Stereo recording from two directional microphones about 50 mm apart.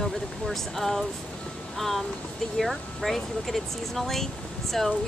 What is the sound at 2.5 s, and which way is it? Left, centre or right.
Speech, centre.